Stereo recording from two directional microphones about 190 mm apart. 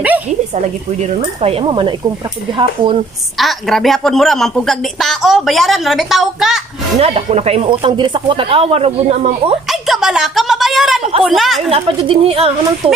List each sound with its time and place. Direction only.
1.0 s speech: 30° right (ahead or behind)
3.3 s a woman's voice: centre (ahead or behind)
7.0 s speech: 35° right (ahead or behind)
9.7 s a sound: centre (ahead or behind)
11.0 s a sound: 30° right (ahead or behind)
11.2 s a woman's voice: centre (ahead or behind)
11.7 s speech: 30° right (ahead or behind)